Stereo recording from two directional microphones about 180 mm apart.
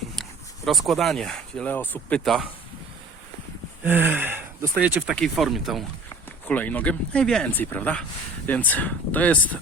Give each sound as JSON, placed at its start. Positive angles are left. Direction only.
{"t": 0.2, "sound": "speech", "side_deg": 0}
{"t": 3.8, "sound": "speech", "side_deg": -10}